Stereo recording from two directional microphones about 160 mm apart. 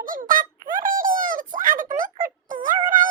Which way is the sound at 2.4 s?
55° right (ahead or behind).